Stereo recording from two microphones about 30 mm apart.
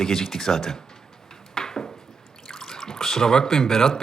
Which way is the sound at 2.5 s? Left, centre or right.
Centre.